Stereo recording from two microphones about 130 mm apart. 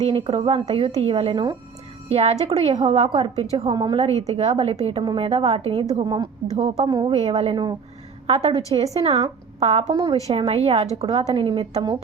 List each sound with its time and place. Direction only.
0.0 s a woman's voice: 45° right (ahead or behind)
3.7 s a woman's voice: 30° right (ahead or behind)
4.3 s a woman's voice: 50° right (ahead or behind)
6.1 s a woman's voice: 35° right (ahead or behind)
7.1 s a woman's voice: 45° right (ahead or behind)
8.3 s a woman's voice: 50° right (ahead or behind)
9.9 s a woman's voice: 30° right (ahead or behind)
10.2 s a woman's voice: 50° right (ahead or behind)